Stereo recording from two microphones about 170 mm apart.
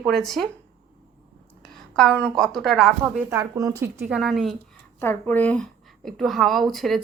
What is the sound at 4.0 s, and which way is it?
Speech, centre (ahead or behind).